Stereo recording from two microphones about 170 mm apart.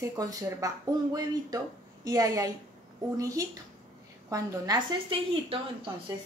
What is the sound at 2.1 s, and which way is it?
A woman's voice, 20° right (ahead or behind).